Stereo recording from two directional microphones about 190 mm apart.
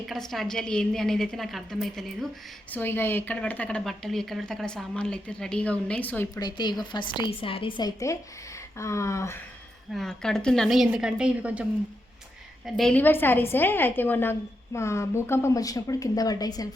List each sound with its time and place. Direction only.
0.1 s speech: centre (ahead or behind)
2.7 s speech: 10° left (ahead or behind)
6.4 s a woman's voice: 20° left (ahead or behind)
9.9 s speech: 5° left (ahead or behind)
12.6 s a woman's voice: centre (ahead or behind); by 16.6 s 20° left (ahead or behind)